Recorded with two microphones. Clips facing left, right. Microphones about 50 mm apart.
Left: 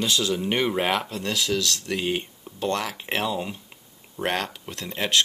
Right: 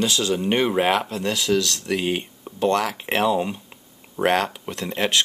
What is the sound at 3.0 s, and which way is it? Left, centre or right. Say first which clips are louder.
Speech: right 6 dB; centre.